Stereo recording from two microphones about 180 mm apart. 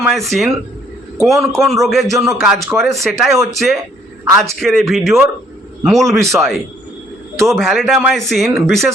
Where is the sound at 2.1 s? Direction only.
15° right (ahead or behind).